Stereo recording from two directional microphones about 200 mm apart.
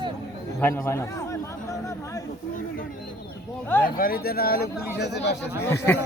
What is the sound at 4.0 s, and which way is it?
Speech, 50° left (ahead or behind).